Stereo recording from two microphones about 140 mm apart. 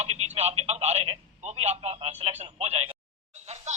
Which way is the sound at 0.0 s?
50° right (ahead or behind).